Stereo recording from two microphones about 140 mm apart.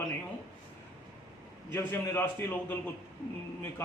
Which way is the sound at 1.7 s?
15° left (ahead or behind).